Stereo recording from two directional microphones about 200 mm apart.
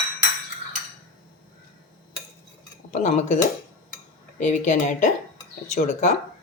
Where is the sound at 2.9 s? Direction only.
35° left (ahead or behind).